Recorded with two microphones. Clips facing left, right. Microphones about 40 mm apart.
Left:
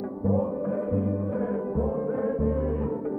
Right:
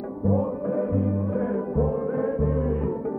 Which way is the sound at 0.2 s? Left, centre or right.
Centre.